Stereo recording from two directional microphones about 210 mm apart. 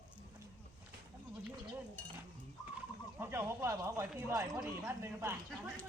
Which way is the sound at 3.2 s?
10° right (ahead or behind).